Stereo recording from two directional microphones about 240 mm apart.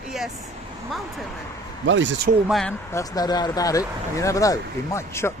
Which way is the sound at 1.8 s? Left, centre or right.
Right.